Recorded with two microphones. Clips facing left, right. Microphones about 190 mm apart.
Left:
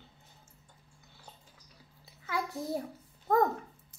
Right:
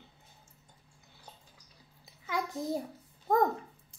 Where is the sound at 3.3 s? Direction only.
15° right (ahead or behind).